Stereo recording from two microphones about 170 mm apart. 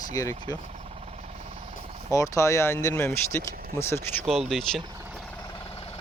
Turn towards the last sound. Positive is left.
turn(degrees=0)  # may be behind; listen again after turning